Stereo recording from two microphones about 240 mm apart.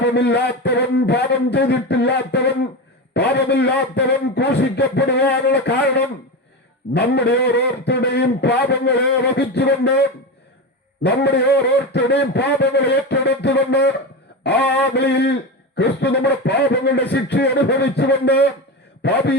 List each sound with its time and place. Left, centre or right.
0.0 s a man's voice: left
11.0 s a man's voice: left